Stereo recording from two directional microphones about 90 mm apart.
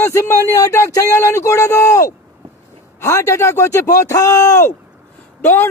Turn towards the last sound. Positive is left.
turn(degrees=25)  # may be behind; listen again after turning